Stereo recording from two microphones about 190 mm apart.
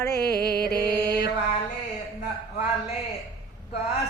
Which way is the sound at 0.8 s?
20° right (ahead or behind).